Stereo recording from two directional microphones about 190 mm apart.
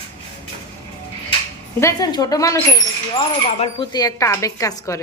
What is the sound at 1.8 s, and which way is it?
Speech, 20° left (ahead or behind).